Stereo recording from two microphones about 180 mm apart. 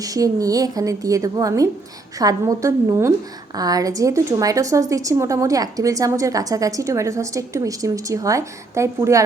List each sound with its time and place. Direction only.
0.0 s a woman's voice: 20° right (ahead or behind)